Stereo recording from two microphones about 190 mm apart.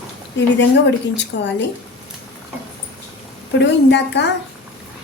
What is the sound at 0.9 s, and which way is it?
Speech, 70° left (ahead or behind).